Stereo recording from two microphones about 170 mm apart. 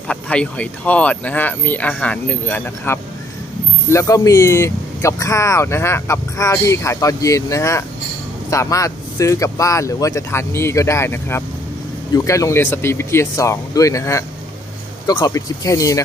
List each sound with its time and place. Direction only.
0.1 s speech: 5° left (ahead or behind)